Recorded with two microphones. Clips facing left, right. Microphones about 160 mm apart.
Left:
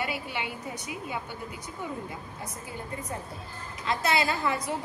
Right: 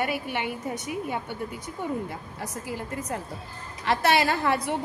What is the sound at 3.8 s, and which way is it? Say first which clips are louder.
Speech: right 4 dB; 75° right (ahead or behind).